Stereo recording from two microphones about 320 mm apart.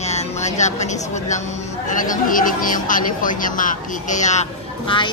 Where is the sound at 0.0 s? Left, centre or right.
Left.